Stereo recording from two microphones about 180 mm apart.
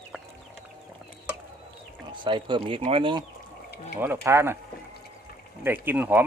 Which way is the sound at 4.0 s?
15° right (ahead or behind).